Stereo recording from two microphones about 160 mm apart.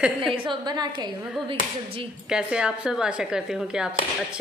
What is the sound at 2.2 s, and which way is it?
Speech, 5° right (ahead or behind).